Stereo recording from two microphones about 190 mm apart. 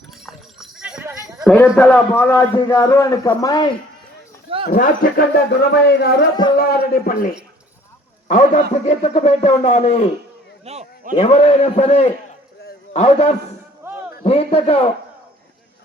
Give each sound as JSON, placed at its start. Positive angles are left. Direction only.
{"t": 0.3, "sound": "clip-clop", "side_deg": -5}
{"t": 1.7, "sound": "a man's voice", "side_deg": 10}
{"t": 4.6, "sound": "speech", "side_deg": 45}
{"t": 10.7, "sound": "a sound", "side_deg": -35}
{"t": 11.1, "sound": "a man's voice", "side_deg": 35}
{"t": 13.8, "sound": "a sound", "side_deg": -15}
{"t": 14.3, "sound": "speech", "side_deg": 30}